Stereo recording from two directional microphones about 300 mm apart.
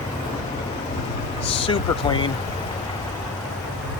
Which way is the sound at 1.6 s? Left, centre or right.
Centre.